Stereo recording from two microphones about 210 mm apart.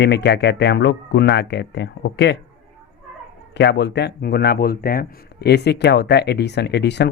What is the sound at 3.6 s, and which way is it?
Speech, 55° left (ahead or behind).